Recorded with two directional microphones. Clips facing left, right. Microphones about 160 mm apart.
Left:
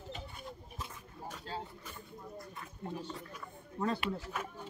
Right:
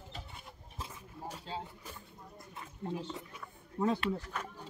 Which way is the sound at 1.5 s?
20° right (ahead or behind).